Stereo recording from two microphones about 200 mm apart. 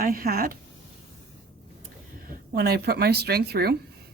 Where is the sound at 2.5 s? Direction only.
55° right (ahead or behind).